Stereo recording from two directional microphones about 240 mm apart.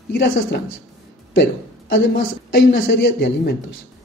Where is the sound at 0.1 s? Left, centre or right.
Left.